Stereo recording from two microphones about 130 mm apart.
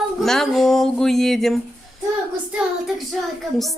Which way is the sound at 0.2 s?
Centre (ahead or behind).